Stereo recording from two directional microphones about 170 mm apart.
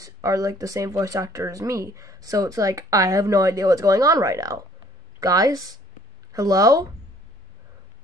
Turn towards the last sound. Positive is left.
turn(degrees=-20)  # may be behind; listen again after turning